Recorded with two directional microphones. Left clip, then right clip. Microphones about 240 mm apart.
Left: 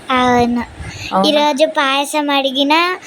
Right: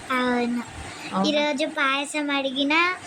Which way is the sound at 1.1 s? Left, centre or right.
Centre.